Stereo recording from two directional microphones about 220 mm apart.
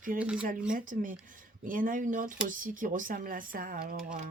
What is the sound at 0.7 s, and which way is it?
Speech, 35° right (ahead or behind).